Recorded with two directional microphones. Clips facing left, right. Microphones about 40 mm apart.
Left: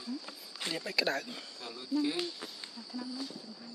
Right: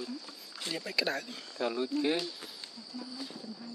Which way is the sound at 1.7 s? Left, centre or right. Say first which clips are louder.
Right 1 dB; right.